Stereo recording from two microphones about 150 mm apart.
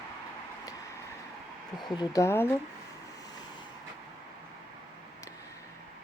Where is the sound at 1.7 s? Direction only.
30° left (ahead or behind).